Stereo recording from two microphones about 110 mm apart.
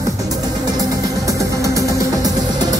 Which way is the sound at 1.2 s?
30° right (ahead or behind).